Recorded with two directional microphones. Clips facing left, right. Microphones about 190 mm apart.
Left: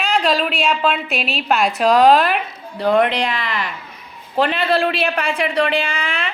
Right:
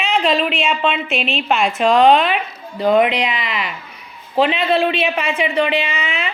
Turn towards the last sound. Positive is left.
turn(degrees=-5)  # may be behind; listen again after turning